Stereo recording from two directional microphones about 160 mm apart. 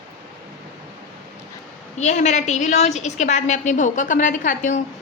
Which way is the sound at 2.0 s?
50° left (ahead or behind).